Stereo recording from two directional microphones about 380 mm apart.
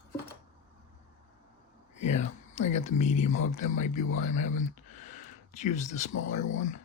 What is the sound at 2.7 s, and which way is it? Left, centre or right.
Speech, centre.